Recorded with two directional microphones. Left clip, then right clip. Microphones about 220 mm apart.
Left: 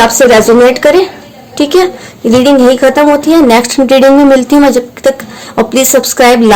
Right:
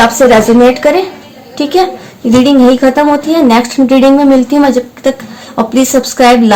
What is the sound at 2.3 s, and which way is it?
A woman's voice, 45° left (ahead or behind).